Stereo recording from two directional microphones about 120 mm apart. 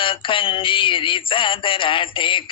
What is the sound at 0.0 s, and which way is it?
Music, 45° left (ahead or behind).